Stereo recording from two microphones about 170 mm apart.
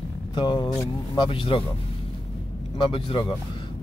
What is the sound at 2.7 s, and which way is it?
Speech, 30° left (ahead or behind).